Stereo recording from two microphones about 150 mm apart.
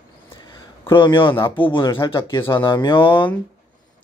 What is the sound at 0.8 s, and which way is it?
Speech, 35° left (ahead or behind).